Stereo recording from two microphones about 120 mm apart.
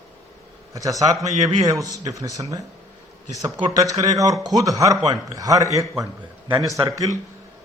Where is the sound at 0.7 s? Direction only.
30° right (ahead or behind).